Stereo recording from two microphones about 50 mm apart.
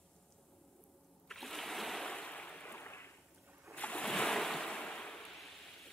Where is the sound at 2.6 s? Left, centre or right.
Left.